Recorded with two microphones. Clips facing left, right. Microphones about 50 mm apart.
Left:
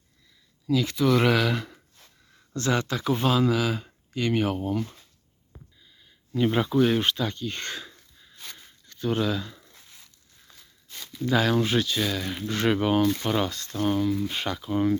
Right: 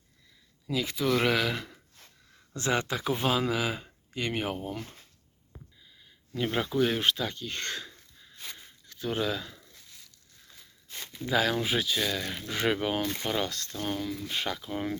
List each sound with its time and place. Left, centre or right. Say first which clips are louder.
0.7 s speech: left 5 dB; centre
2.6 s speech: left 3 dB; right; by 4.9 s centre
6.3 s speech: left 6 dB; centre
9.6 s a sound: left 2 dB; left
11.3 s speech: left 4 dB; centre